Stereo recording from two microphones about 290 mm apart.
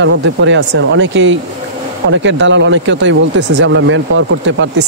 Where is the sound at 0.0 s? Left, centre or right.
Right.